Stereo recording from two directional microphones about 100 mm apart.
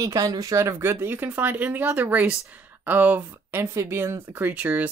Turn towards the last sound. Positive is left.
turn(degrees=-15)  # may be behind; listen again after turning